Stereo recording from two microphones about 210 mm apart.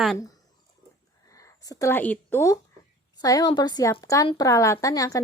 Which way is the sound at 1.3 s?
15° left (ahead or behind).